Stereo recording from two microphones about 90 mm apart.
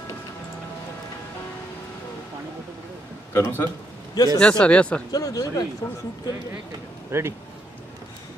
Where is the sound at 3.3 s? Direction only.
25° left (ahead or behind).